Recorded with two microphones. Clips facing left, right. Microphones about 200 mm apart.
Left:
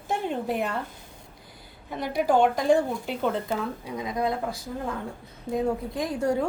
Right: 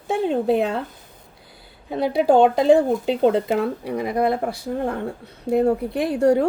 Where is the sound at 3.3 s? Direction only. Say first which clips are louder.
Right 7 dB; 75° right (ahead or behind).